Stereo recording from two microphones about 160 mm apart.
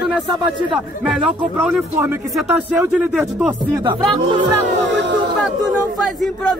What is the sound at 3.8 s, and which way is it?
Speech, 30° right (ahead or behind).